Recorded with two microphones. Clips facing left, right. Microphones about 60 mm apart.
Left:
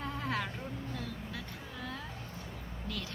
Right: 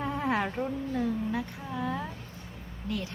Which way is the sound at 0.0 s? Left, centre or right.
Right.